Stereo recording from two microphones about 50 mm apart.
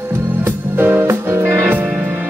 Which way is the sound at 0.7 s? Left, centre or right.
Right.